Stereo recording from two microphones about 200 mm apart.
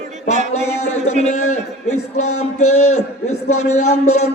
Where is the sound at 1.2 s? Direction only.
35° left (ahead or behind).